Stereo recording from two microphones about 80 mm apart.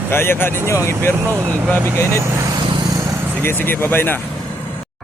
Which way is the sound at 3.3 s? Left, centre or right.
Left.